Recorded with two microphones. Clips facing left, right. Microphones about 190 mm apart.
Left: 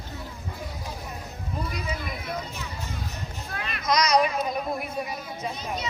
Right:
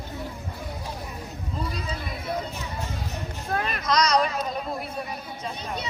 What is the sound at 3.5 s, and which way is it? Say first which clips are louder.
Speech: right 9 dB; 45° right (ahead or behind).